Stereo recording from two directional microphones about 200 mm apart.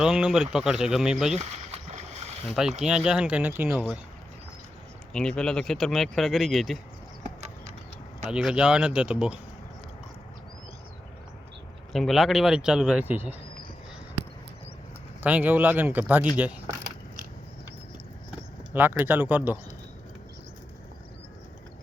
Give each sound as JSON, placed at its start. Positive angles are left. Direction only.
{"t": 0.0, "sound": "speech", "side_deg": -5}
{"t": 1.4, "sound": "boat", "side_deg": -35}
{"t": 2.5, "sound": "speech", "side_deg": 0}
{"t": 5.1, "sound": "speech", "side_deg": 5}
{"t": 8.3, "sound": "speech", "side_deg": -5}
{"t": 11.9, "sound": "speech", "side_deg": 0}
{"t": 15.2, "sound": "speech", "side_deg": -5}
{"t": 18.7, "sound": "speech", "side_deg": -10}